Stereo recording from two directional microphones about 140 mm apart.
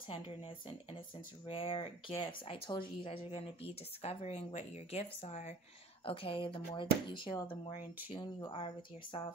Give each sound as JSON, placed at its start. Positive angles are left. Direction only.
{"t": 0.1, "sound": "speech", "side_deg": 40}
{"t": 6.0, "sound": "speech", "side_deg": 40}